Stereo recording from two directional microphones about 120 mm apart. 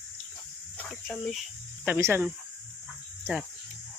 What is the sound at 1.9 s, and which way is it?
Speech, 20° right (ahead or behind).